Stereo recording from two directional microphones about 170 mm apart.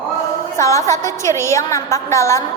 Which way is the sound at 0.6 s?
15° left (ahead or behind).